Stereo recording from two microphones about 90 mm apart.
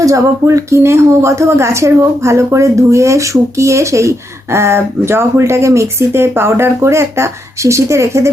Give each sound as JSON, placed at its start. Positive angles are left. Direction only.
{"t": 0.0, "sound": "speech", "side_deg": -35}